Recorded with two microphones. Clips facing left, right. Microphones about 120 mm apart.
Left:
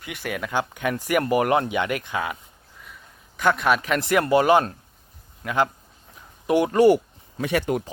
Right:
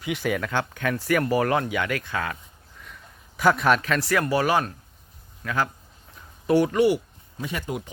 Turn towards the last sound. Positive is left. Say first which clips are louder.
# left 7 dB
turn(degrees=70)  # may be behind; listen again after turning